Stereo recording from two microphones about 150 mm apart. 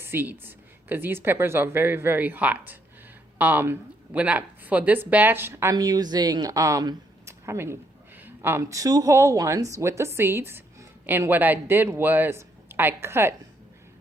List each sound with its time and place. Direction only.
0.0 s a woman's voice: 15° right (ahead or behind)